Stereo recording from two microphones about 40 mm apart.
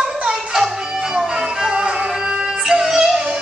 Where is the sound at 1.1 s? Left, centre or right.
Centre.